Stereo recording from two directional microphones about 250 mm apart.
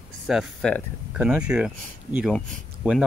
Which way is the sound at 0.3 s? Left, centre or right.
Centre.